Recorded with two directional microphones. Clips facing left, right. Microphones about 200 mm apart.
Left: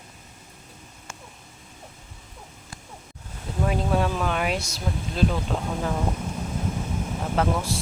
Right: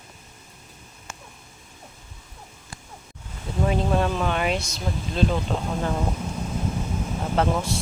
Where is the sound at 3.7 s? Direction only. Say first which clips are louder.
Right 1 dB; centre (ahead or behind).